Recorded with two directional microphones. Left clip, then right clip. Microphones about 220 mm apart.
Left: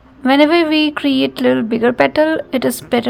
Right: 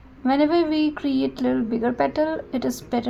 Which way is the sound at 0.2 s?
25° left (ahead or behind).